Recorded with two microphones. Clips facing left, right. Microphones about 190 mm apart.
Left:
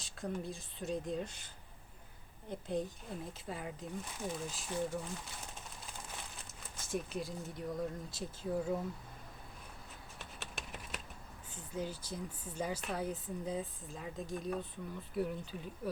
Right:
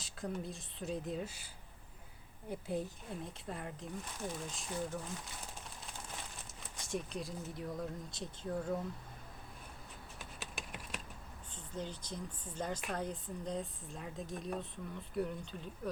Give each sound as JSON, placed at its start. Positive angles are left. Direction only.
{"t": 0.0, "sound": "speech", "side_deg": 0}
{"t": 2.5, "sound": "speech", "side_deg": -5}
{"t": 6.7, "sound": "speech", "side_deg": 0}
{"t": 10.4, "sound": "a sound", "side_deg": 0}
{"t": 11.5, "sound": "speech", "side_deg": 10}